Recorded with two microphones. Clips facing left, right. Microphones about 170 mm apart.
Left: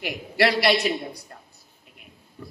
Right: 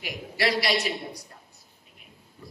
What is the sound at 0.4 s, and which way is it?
Speech, 60° left (ahead or behind).